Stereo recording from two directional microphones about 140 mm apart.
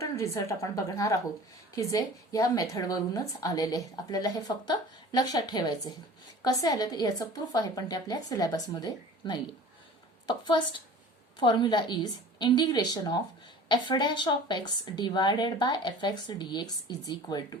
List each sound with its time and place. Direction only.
0.0 s a woman's voice: 20° left (ahead or behind)